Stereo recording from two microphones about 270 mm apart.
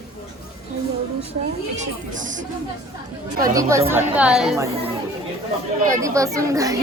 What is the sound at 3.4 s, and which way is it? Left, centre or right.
A woman's voice, centre.